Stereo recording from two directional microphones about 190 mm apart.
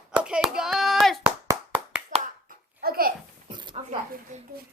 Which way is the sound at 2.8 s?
50° right (ahead or behind).